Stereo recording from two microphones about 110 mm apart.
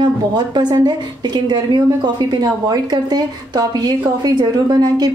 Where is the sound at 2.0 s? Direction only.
40° right (ahead or behind).